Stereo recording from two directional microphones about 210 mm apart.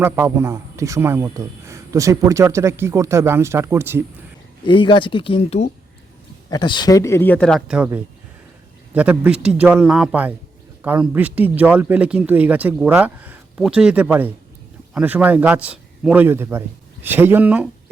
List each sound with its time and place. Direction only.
0.0 s a man's voice: 10° right (ahead or behind)
4.6 s speech: 25° left (ahead or behind); by 7.9 s centre (ahead or behind)
8.9 s a man's voice: 5° right (ahead or behind)